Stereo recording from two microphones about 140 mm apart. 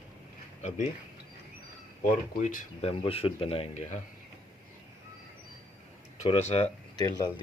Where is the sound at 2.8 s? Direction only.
45° left (ahead or behind).